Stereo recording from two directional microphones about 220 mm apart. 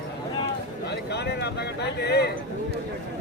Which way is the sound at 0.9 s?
50° left (ahead or behind).